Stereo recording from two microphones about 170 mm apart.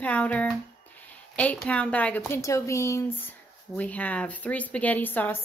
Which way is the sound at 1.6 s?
10° left (ahead or behind).